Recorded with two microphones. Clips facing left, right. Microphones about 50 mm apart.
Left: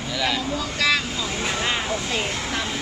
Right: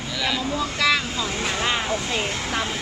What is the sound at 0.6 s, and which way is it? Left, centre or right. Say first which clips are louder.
Speech: right 2 dB; centre.